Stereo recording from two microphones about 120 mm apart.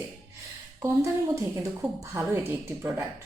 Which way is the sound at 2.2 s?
25° right (ahead or behind).